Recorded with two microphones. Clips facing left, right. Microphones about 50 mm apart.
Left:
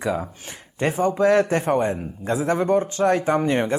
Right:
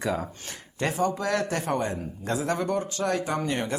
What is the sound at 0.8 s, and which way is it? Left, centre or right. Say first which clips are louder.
A man's voice: left 7 dB; left.